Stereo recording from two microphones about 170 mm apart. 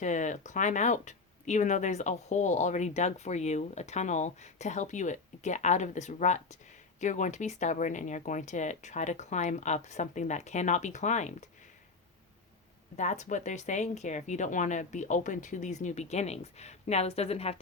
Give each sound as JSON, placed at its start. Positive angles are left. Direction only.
{"t": 0.0, "sound": "speech", "side_deg": 45}
{"t": 13.0, "sound": "speech", "side_deg": 45}